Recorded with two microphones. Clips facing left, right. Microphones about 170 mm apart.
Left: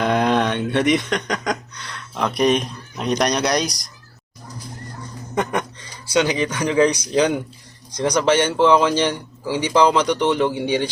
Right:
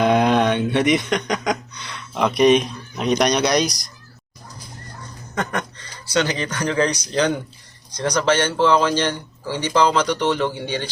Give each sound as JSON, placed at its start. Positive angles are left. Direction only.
{"t": 0.0, "sound": "speech", "side_deg": -5}
{"t": 5.3, "sound": "a sound", "side_deg": 15}
{"t": 6.1, "sound": "a man's voice", "side_deg": 10}